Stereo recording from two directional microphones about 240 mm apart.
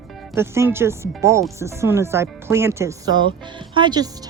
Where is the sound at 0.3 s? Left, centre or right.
Centre.